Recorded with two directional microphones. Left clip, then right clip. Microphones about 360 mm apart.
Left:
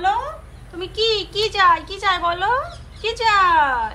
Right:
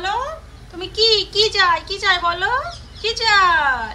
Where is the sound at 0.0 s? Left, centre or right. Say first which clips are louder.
Left 2 dB; centre.